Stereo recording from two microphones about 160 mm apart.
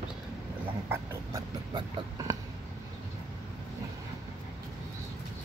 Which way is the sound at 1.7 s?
20° right (ahead or behind).